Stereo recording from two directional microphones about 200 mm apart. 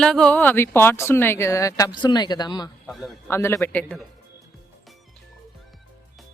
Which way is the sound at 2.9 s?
Centre (ahead or behind).